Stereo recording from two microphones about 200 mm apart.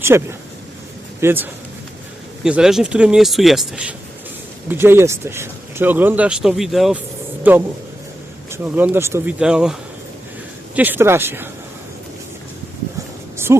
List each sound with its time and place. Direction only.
0.0 s speech: 10° right (ahead or behind)
10.8 s speech: 10° right (ahead or behind)
13.3 s a sound: 15° right (ahead or behind)